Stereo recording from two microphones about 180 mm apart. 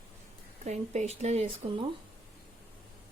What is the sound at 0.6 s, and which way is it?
Speech, 40° right (ahead or behind).